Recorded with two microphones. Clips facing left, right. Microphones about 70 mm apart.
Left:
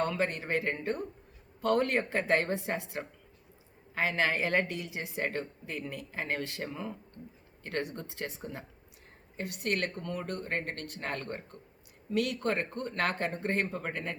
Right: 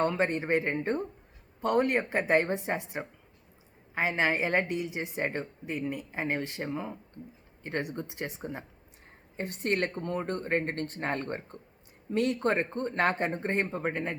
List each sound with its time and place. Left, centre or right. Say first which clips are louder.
0.0 s a woman's voice: right 3 dB; right